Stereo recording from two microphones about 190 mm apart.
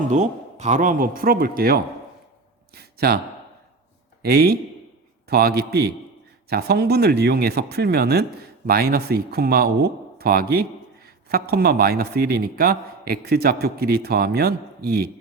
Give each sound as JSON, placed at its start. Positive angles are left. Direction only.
{"t": 0.1, "sound": "speech", "side_deg": -35}
{"t": 2.7, "sound": "a sound", "side_deg": -55}
{"t": 4.2, "sound": "a man's voice", "side_deg": -55}